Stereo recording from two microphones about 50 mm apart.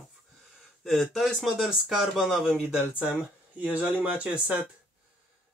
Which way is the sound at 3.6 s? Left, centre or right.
Right.